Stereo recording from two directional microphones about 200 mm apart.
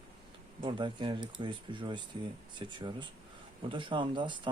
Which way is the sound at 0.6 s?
25° right (ahead or behind).